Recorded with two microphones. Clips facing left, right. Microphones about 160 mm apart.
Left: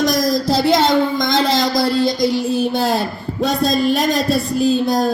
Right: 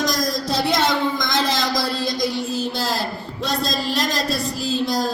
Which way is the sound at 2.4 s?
60° left (ahead or behind).